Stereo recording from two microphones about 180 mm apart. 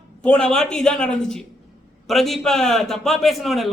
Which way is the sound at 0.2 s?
5° left (ahead or behind).